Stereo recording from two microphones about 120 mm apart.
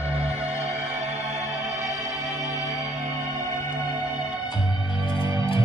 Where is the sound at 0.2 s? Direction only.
60° right (ahead or behind).